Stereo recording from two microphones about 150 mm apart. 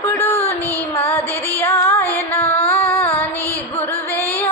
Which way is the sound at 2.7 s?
40° left (ahead or behind).